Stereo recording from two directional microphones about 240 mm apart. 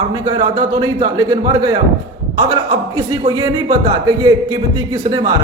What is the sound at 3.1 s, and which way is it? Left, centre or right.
Speech, centre.